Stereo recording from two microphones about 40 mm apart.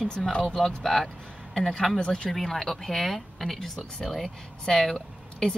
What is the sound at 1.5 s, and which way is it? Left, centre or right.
Speech, centre.